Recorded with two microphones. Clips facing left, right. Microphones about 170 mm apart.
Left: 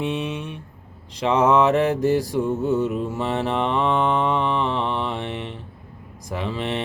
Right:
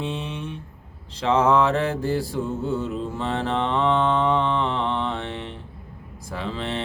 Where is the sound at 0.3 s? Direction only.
10° left (ahead or behind).